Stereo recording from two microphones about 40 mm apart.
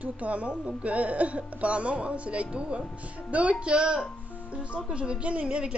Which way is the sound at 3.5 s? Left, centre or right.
Right.